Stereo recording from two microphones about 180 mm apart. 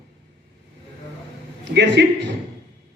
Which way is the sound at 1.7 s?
75° right (ahead or behind).